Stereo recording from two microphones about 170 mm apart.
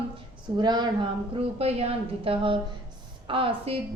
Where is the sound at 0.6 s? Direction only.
25° right (ahead or behind).